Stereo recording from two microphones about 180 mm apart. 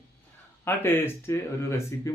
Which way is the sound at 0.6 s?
10° left (ahead or behind).